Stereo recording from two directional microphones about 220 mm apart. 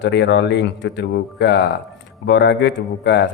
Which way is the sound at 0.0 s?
55° left (ahead or behind).